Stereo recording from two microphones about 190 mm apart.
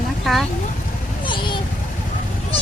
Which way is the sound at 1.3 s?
25° left (ahead or behind).